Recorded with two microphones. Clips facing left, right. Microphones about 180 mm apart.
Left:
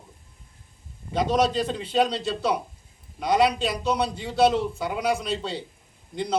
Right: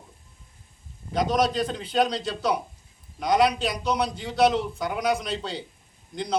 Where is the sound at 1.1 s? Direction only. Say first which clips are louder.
Left 1 dB; 5° left (ahead or behind).